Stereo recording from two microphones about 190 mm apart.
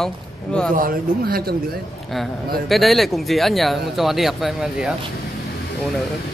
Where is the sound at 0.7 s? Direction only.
50° right (ahead or behind).